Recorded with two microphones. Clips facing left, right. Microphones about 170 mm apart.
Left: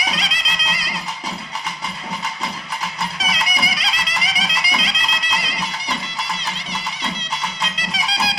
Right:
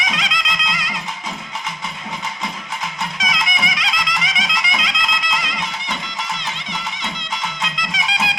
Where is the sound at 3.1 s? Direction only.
35° left (ahead or behind).